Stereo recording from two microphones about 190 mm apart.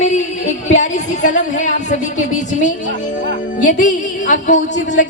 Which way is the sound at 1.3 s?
40° left (ahead or behind).